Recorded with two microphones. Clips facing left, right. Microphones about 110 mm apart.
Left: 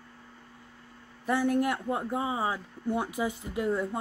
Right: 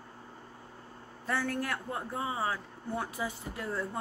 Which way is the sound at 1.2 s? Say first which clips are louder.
Left 7 dB; 15° left (ahead or behind).